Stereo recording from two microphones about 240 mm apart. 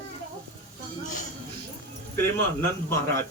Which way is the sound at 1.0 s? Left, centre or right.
Left.